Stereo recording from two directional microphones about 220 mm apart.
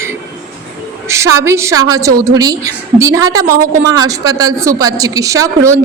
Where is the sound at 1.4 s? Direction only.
10° right (ahead or behind).